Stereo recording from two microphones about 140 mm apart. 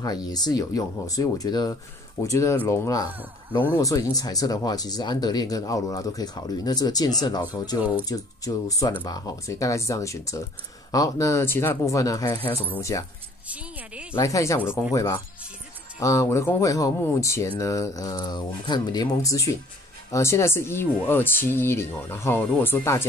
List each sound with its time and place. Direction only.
0.0 s speech: 30° left (ahead or behind)
14.1 s speech: 20° left (ahead or behind)